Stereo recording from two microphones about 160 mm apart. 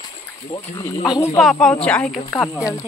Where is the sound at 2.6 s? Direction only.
15° left (ahead or behind).